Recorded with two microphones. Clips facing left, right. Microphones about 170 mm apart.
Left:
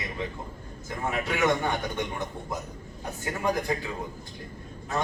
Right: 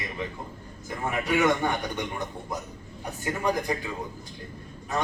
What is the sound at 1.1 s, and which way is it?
Speech, 15° right (ahead or behind).